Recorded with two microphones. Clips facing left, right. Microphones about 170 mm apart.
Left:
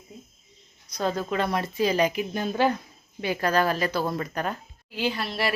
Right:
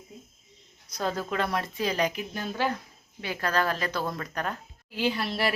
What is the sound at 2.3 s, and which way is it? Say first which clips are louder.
A woman's voice: left 5 dB; 20° left (ahead or behind).